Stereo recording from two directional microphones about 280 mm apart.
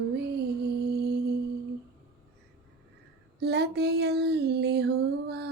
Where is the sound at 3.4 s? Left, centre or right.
Right.